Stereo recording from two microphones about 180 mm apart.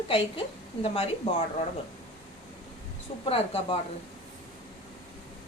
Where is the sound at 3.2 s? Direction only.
35° left (ahead or behind).